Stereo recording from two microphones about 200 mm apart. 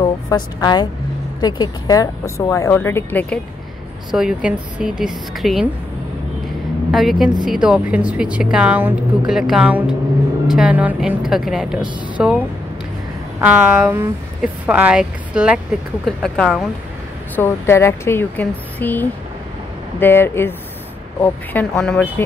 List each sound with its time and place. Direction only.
0.0 s a woman's voice: 20° left (ahead or behind)
4.1 s speech: 5° right (ahead or behind)
6.9 s speech: centre (ahead or behind)
13.4 s a woman's voice: 10° right (ahead or behind)
17.4 s speech: 10° left (ahead or behind)